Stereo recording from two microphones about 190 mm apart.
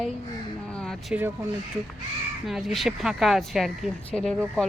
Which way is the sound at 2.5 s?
Centre (ahead or behind).